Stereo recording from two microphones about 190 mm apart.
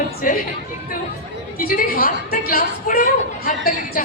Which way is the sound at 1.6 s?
50° left (ahead or behind).